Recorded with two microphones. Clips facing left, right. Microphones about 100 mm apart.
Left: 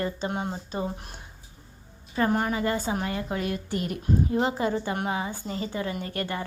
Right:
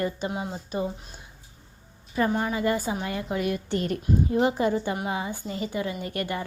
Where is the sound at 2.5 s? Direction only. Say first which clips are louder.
Right 1 dB; 30° left (ahead or behind).